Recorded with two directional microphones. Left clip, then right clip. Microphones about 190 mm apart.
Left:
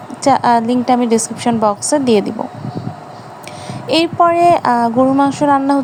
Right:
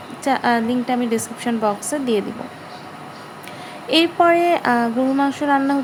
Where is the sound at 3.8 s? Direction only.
25° left (ahead or behind).